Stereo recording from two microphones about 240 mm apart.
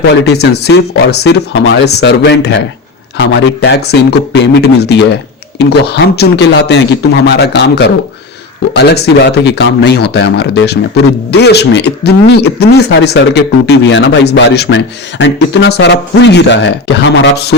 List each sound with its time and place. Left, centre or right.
0.0 s speech: left